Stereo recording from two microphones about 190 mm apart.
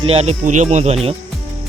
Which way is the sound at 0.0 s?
30° right (ahead or behind).